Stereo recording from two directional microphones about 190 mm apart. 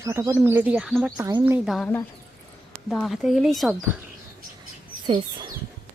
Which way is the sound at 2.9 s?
Centre (ahead or behind).